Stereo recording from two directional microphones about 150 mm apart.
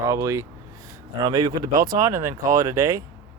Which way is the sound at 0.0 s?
20° right (ahead or behind).